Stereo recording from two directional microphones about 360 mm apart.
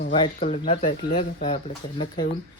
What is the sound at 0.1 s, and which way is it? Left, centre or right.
Speech, centre.